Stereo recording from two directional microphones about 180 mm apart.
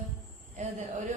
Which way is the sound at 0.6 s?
40° right (ahead or behind).